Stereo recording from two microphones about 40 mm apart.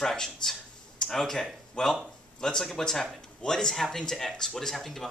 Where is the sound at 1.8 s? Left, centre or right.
Centre.